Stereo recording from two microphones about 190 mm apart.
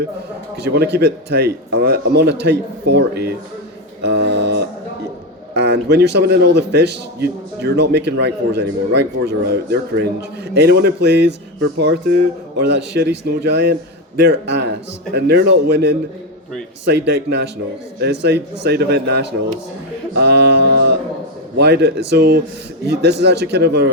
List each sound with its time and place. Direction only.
0.5 s a man's voice: 60° right (ahead or behind)
17.1 s a man's voice: 55° right (ahead or behind)